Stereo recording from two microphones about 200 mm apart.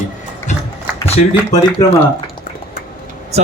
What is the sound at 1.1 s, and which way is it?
Speech, 30° left (ahead or behind).